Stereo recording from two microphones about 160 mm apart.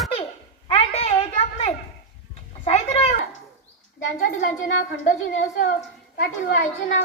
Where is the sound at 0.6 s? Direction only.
35° left (ahead or behind).